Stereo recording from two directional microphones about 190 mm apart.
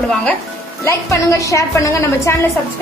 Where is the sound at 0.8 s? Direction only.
15° left (ahead or behind).